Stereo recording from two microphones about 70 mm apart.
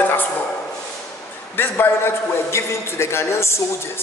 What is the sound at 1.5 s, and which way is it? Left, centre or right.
A man's voice, left.